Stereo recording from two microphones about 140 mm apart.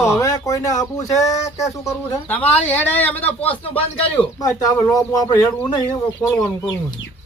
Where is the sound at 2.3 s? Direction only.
10° left (ahead or behind).